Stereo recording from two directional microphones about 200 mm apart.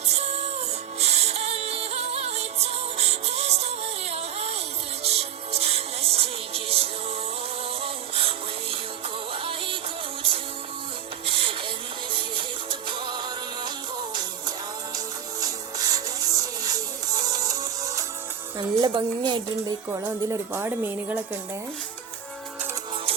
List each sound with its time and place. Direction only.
0.1 s music: 30° right (ahead or behind)
11.3 s music: 25° right (ahead or behind)
12.9 s music: 20° right (ahead or behind)
18.6 s a woman's voice: 20° right (ahead or behind)